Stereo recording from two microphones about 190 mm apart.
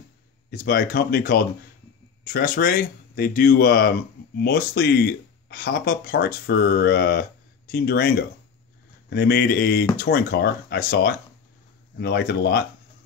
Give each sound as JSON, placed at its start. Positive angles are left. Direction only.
{"t": 0.5, "sound": "speech", "side_deg": 50}
{"t": 9.1, "sound": "speech", "side_deg": 55}